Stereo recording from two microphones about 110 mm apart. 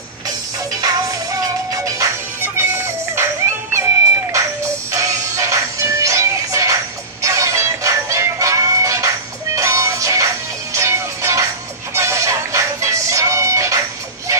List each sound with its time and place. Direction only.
0.7 s music: 35° right (ahead or behind)